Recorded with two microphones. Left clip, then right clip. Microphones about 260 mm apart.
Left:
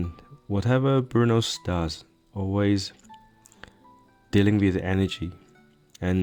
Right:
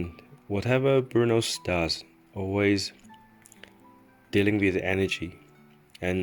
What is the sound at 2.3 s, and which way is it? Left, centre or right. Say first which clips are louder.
Speech: even; left.